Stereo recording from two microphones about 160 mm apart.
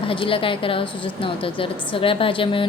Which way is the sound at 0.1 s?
35° left (ahead or behind).